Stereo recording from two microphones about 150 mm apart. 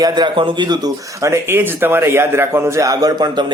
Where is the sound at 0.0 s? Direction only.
30° right (ahead or behind).